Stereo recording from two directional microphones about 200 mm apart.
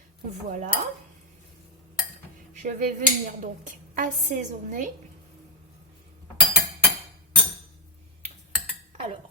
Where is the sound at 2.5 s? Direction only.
40° right (ahead or behind).